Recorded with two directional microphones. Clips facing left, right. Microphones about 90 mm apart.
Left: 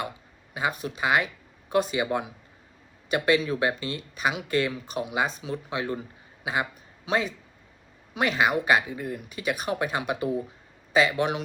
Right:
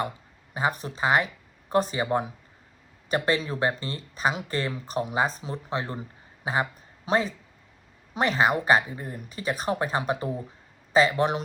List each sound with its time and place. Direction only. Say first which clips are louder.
0.5 s speech: right 1 dB; 35° right (ahead or behind)